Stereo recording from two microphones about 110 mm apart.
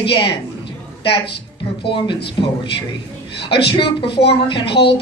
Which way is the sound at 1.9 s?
50° left (ahead or behind).